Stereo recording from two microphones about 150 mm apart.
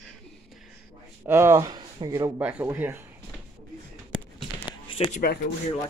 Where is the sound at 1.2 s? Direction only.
15° right (ahead or behind).